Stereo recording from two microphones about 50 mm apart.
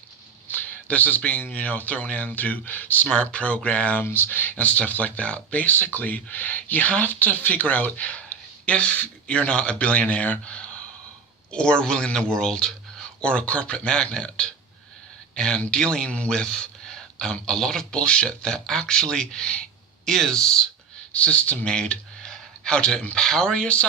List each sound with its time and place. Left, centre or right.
0.5 s speech: left
3.1 s speech: centre
4.0 s speech: left; by 16.0 s centre
16.0 s speech: left
16.3 s speech: centre
17.9 s speech: left
21.1 s speech: left